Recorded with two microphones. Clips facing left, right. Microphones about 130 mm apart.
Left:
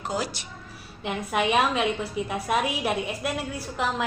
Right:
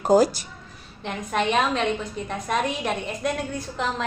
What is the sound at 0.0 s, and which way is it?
Speech, 40° right (ahead or behind).